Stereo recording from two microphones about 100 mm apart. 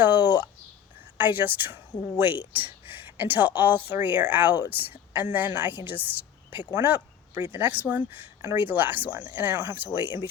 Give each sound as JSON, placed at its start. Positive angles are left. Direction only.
{"t": 0.0, "sound": "speech", "side_deg": -20}